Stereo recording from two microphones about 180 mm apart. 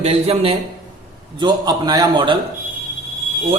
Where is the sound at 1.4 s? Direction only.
25° right (ahead or behind).